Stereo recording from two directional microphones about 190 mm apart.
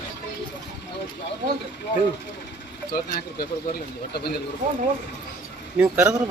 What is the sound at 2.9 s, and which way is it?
Speech, 50° left (ahead or behind).